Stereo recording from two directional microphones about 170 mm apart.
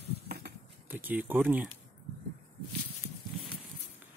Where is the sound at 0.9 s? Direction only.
10° right (ahead or behind).